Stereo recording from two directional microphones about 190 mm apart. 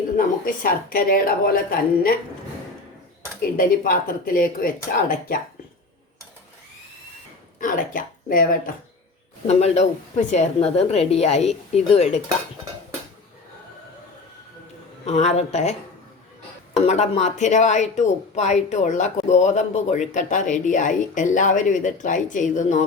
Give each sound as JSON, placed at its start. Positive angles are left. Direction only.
{"t": 0.2, "sound": "a woman's voice", "side_deg": 50}
{"t": 3.6, "sound": "a woman's voice", "side_deg": 50}
{"t": 7.6, "sound": "a woman's voice", "side_deg": 45}
{"t": 9.5, "sound": "a woman's voice", "side_deg": 35}
{"t": 15.0, "sound": "a woman's voice", "side_deg": 35}
{"t": 16.7, "sound": "a woman's voice", "side_deg": 35}